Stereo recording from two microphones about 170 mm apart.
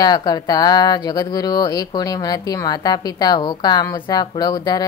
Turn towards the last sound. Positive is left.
turn(degrees=25)  # may be behind; listen again after turning